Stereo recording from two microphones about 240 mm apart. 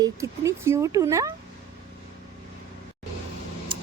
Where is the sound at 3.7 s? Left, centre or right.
Right.